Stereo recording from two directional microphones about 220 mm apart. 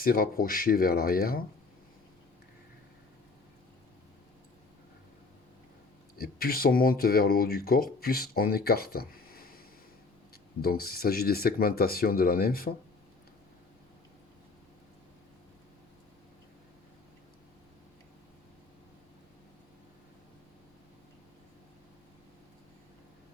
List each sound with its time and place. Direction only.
0.0 s speech: 40° left (ahead or behind)
6.1 s speech: 45° left (ahead or behind)
10.6 s speech: 45° left (ahead or behind)